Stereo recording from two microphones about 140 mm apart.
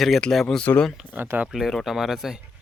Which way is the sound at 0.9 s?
10° right (ahead or behind).